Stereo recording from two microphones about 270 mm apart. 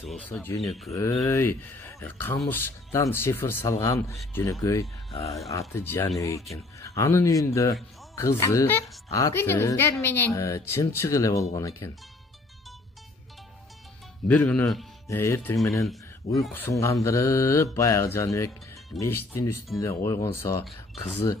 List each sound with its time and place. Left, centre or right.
0.1 s speech: centre
0.9 s a woman's voice: centre
14.2 s a woman's voice: centre
16.3 s a woman's voice: centre
20.1 s a woman's voice: centre